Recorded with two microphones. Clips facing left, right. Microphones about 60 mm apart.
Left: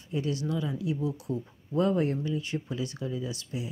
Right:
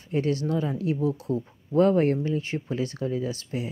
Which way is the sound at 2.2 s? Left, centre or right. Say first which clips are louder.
Right 4 dB; right.